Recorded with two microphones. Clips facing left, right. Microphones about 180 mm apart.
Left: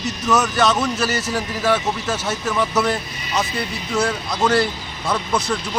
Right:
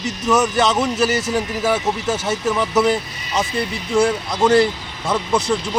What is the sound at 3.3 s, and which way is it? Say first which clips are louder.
Speech: right 2 dB; 30° right (ahead or behind).